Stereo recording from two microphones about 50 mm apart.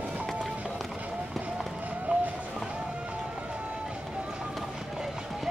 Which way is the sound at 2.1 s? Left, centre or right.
Right.